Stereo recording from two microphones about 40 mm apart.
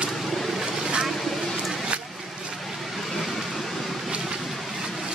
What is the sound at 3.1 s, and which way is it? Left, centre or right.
Vehicle, centre.